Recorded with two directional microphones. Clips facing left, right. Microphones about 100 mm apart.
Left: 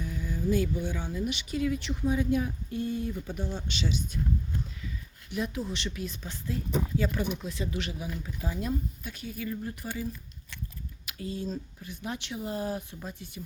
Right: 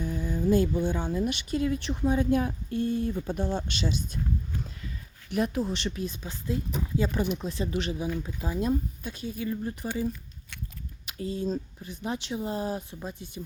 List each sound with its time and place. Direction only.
0.0 s a sound: 30° right (ahead or behind)
0.5 s speech: 40° right (ahead or behind)
0.8 s speech: 25° right (ahead or behind)
1.1 s speech: 40° right (ahead or behind)
2.4 s a sound: 55° right (ahead or behind)
3.1 s speech: 40° right (ahead or behind)
5.3 s speech: 50° right (ahead or behind)
6.2 s speech: 20° right (ahead or behind)
7.4 s speech: 35° right (ahead or behind)